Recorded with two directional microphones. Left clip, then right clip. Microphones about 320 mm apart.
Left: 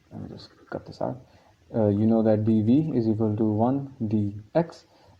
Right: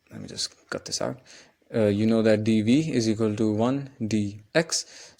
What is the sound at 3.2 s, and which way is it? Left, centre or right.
Speech, right.